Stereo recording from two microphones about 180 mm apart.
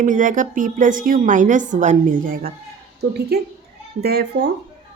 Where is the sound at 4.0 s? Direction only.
65° right (ahead or behind).